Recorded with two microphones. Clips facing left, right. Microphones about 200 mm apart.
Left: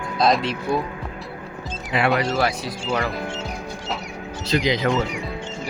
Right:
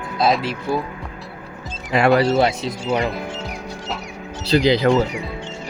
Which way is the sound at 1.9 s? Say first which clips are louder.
Right 4 dB; 40° right (ahead or behind).